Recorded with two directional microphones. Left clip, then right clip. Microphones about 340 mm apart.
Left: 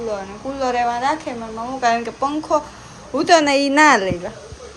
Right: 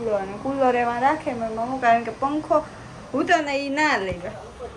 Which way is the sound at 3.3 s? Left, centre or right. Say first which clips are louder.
Left 8 dB; left.